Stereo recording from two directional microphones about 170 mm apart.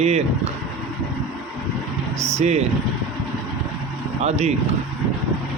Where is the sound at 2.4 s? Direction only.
40° right (ahead or behind).